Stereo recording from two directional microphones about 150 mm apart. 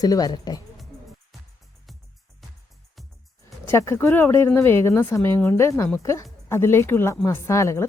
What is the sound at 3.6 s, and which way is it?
Speech, 20° left (ahead or behind).